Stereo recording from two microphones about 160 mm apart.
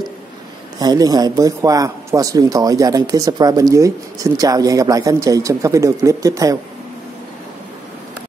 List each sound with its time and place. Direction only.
0.7 s speech: 25° right (ahead or behind)